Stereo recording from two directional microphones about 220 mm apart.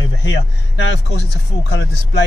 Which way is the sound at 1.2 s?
50° left (ahead or behind).